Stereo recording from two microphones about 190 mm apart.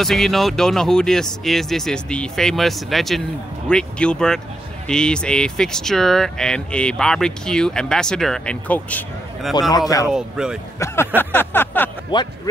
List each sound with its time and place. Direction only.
0.0 s speech: centre (ahead or behind)
9.6 s speech: 20° left (ahead or behind)
10.0 s speech: 5° right (ahead or behind)
11.1 s a sound: 10° left (ahead or behind)
12.1 s speech: 25° left (ahead or behind)